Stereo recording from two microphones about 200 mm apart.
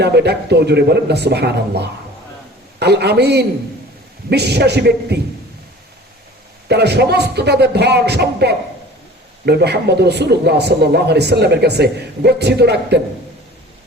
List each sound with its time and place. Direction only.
0.0 s speech: 55° right (ahead or behind)
6.7 s speech: 55° right (ahead or behind)